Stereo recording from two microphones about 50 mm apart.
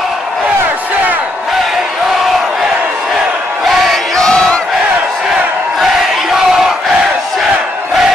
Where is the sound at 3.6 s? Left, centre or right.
Centre.